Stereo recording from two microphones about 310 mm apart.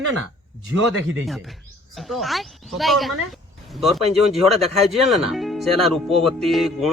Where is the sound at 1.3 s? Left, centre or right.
Centre.